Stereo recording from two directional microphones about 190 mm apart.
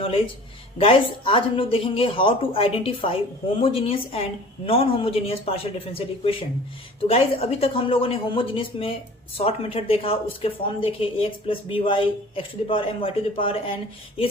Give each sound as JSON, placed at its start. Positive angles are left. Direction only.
{"t": 0.8, "sound": "speech", "side_deg": 30}